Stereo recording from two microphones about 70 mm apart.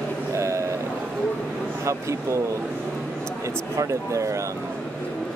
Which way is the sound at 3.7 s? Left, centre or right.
Right.